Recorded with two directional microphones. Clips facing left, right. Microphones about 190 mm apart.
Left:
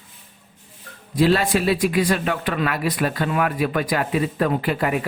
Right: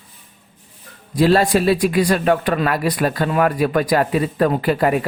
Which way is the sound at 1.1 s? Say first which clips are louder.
Right 3 dB; 40° right (ahead or behind).